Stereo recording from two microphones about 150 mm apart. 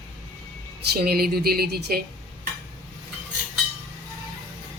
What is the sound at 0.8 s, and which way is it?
A woman's voice, 90° right.